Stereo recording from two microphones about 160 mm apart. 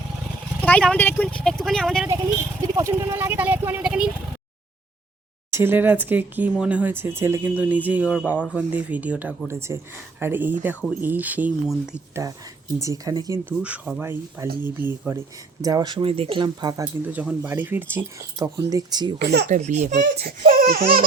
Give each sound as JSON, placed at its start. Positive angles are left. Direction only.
{"t": 0.6, "sound": "speech", "side_deg": 10}
{"t": 2.6, "sound": "speech", "side_deg": -20}
{"t": 5.5, "sound": "speech", "side_deg": -15}
{"t": 12.8, "sound": "speech", "side_deg": -20}
{"t": 13.6, "sound": "speech", "side_deg": -10}
{"t": 15.6, "sound": "speech", "side_deg": -25}
{"t": 16.8, "sound": "speech", "side_deg": -10}
{"t": 19.2, "sound": "speech", "side_deg": -90}
{"t": 19.5, "sound": "speech", "side_deg": -45}
{"t": 20.2, "sound": "laughter", "side_deg": -70}